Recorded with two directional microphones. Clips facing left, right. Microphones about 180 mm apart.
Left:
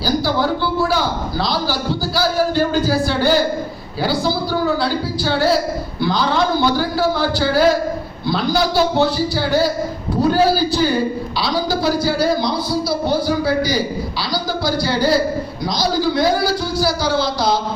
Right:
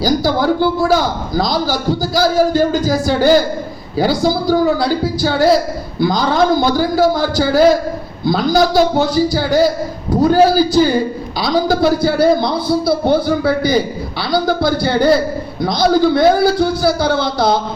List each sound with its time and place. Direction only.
0.0 s a man's voice: 45° right (ahead or behind)